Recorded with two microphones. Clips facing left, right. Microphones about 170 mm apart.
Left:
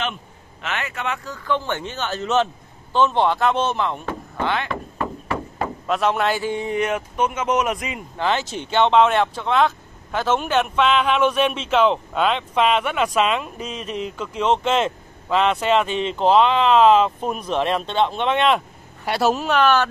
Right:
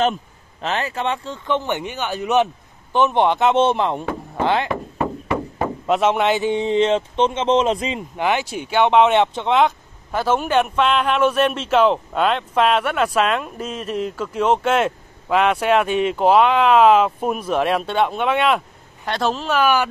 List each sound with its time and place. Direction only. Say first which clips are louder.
0.0 s speech: right 8 dB; 35° right (ahead or behind)
4.4 s a sound: right 5 dB; 30° right (ahead or behind)
5.9 s speech: right 3 dB; 20° right (ahead or behind)
8.2 s speech: right 1 dB; 15° right (ahead or behind)
10.1 s a man's voice: right 2 dB; 10° right (ahead or behind)
13.6 s speech: right 3 dB; 50° right (ahead or behind)
14.4 s speech: right 2 dB; 10° right (ahead or behind)
19.0 s speech: left 2 dB; 10° left (ahead or behind)
19.6 s speech: even; 10° right (ahead or behind)